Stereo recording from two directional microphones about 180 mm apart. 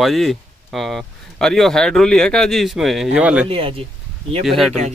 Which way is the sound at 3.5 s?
30° right (ahead or behind).